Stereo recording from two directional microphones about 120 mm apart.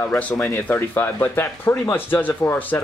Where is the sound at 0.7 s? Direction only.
15° left (ahead or behind).